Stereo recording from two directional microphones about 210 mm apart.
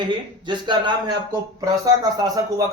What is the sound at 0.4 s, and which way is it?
Speech, 20° right (ahead or behind).